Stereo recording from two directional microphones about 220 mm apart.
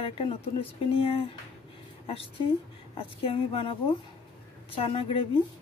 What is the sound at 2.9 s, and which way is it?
Speech, 25° left (ahead or behind).